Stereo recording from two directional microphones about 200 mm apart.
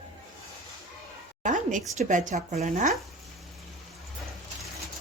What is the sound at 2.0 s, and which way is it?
Speech, 40° right (ahead or behind).